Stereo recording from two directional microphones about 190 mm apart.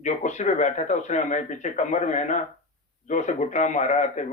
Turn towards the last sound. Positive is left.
turn(degrees=40)  # may be behind; listen again after turning